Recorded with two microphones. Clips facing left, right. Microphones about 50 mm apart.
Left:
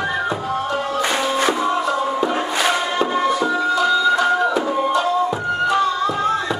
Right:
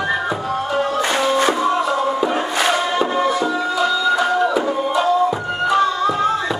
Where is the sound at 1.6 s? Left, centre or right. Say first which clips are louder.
Right 2 dB; centre.